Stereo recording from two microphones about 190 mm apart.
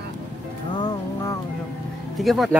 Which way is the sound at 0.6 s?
20° left (ahead or behind).